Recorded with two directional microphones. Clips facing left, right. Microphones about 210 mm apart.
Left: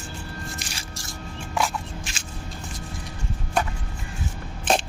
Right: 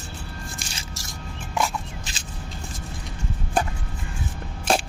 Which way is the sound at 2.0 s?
35° right (ahead or behind).